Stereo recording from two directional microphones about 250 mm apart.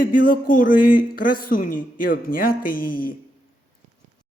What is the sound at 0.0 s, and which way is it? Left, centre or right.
Speech, left.